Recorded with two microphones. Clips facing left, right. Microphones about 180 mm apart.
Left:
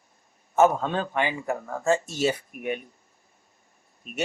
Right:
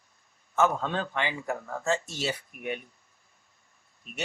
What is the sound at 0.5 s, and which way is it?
Speech, 45° left (ahead or behind).